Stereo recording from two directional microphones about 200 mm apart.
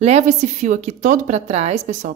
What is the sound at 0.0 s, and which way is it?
A woman's voice, 35° right (ahead or behind).